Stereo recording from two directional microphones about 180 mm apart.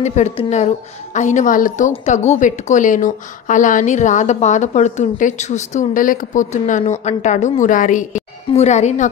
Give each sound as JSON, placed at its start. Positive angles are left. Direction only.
{"t": 0.0, "sound": "a woman's voice", "side_deg": 40}